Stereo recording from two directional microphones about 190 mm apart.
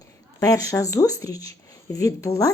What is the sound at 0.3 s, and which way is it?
A woman's voice, 15° left (ahead or behind).